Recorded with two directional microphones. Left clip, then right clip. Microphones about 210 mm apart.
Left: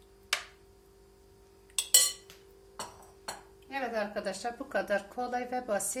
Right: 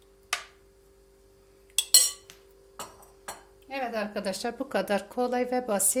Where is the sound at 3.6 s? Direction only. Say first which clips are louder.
Right 2 dB; 45° right (ahead or behind).